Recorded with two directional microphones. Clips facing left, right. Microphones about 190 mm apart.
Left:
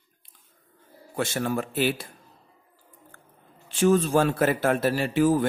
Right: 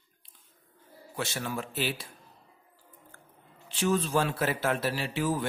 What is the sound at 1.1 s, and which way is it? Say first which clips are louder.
Speech: left 7 dB; 50° left (ahead or behind).